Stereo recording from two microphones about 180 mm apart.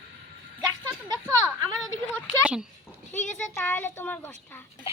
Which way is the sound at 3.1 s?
40° left (ahead or behind).